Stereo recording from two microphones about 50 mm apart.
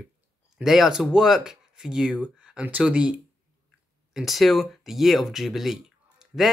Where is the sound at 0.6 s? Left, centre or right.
Centre.